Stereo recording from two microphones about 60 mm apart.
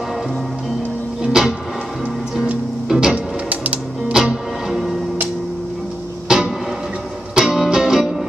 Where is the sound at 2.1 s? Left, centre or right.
Centre.